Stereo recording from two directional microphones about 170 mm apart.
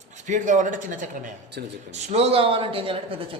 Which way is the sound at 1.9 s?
40° right (ahead or behind).